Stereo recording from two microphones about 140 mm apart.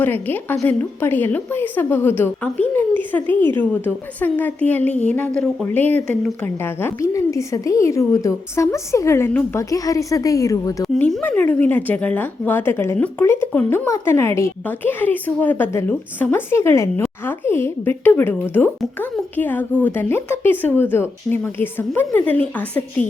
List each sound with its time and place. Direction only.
0.0 s a woman's voice: 15° left (ahead or behind)
10.9 s a woman's voice: 10° left (ahead or behind)